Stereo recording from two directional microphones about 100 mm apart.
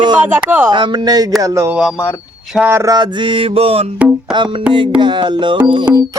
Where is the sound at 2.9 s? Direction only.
50° right (ahead or behind); by 3.8 s 70° right (ahead or behind).